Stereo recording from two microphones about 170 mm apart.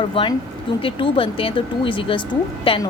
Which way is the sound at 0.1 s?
30° left (ahead or behind).